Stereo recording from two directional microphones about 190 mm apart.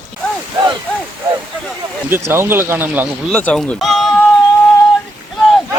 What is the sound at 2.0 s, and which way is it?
Speech, 10° right (ahead or behind).